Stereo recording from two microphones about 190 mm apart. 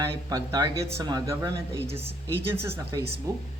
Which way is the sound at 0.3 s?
20° right (ahead or behind).